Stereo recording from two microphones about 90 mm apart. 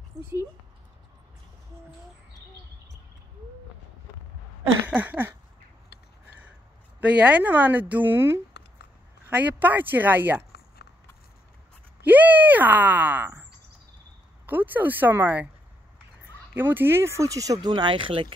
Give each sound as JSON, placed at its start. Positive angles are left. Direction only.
{"t": 0.2, "sound": "speech", "side_deg": -40}
{"t": 4.8, "sound": "a woman's voice", "side_deg": -20}
{"t": 7.0, "sound": "a woman's voice", "side_deg": -15}
{"t": 12.0, "sound": "a sound", "side_deg": -20}
{"t": 14.4, "sound": "a woman's voice", "side_deg": -20}
{"t": 16.5, "sound": "speech", "side_deg": -25}